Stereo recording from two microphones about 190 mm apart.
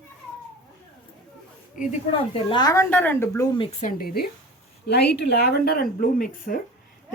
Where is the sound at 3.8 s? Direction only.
45° left (ahead or behind).